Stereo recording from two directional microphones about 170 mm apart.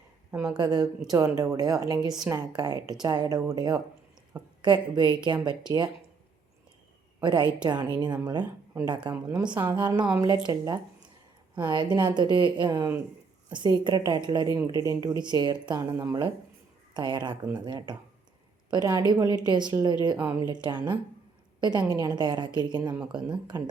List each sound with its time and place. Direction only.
0.3 s a woman's voice: 20° right (ahead or behind)
7.2 s a woman's voice: 25° right (ahead or behind)
9.1 s a woman's voice: 10° right (ahead or behind)
9.6 s a woman's voice: 25° right (ahead or behind)